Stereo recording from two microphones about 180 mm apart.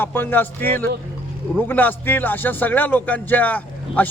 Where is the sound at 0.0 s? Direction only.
10° left (ahead or behind).